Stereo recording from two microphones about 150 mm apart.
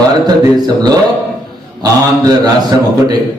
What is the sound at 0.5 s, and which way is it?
A man's voice, 25° right (ahead or behind).